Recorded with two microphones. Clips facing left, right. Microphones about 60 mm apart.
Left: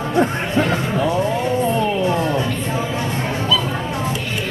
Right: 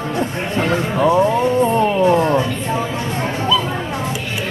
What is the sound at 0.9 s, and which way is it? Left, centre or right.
Speech, right.